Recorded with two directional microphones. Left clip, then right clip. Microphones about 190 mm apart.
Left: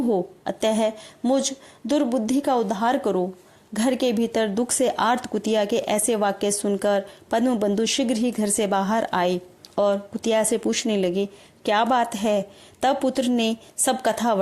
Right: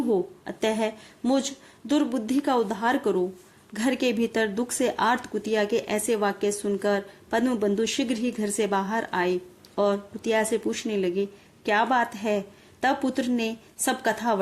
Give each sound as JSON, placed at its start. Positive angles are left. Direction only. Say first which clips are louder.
{"t": 0.1, "sound": "speech", "louder": "left 2 dB", "side_deg": 35}